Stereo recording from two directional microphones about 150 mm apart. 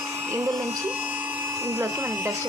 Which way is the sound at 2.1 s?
15° right (ahead or behind).